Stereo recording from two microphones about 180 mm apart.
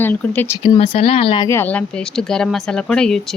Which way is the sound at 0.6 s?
30° left (ahead or behind).